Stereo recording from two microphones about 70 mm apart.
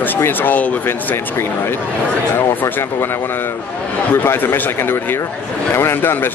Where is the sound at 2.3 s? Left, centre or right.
Left.